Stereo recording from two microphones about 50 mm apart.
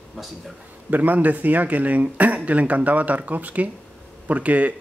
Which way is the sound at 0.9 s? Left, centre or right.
Right.